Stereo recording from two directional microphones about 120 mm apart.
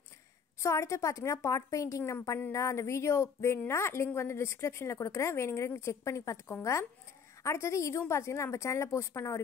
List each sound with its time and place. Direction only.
0.6 s a woman's voice: 25° left (ahead or behind)